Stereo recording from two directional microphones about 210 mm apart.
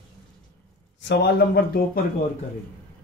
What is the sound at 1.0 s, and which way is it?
Speech, 55° left (ahead or behind).